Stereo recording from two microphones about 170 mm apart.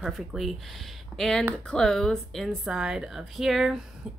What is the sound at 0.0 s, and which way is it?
A woman's voice, centre (ahead or behind).